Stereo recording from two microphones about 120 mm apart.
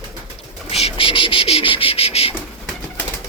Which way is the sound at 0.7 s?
55° left (ahead or behind).